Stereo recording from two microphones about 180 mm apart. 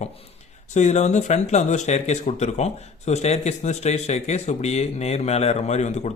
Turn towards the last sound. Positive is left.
turn(degrees=40)  # may be behind; listen again after turning